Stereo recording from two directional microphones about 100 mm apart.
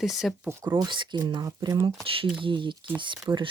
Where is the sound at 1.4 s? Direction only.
35° right (ahead or behind).